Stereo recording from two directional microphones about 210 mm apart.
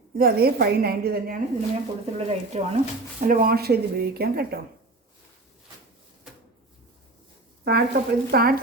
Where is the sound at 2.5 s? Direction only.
30° right (ahead or behind).